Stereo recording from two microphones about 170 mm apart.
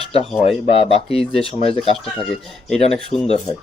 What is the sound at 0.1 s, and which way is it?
Speech, 35° left (ahead or behind).